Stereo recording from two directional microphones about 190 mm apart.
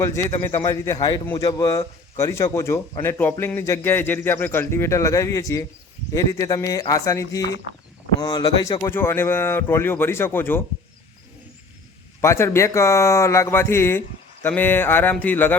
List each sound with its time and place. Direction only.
0.0 s a man's voice: 15° left (ahead or behind)
12.2 s a man's voice: 15° left (ahead or behind)